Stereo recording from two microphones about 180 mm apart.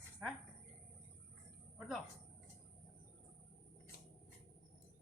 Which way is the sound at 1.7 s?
Centre (ahead or behind).